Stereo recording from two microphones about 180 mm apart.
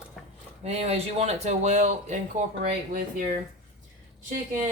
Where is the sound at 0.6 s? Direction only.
35° right (ahead or behind).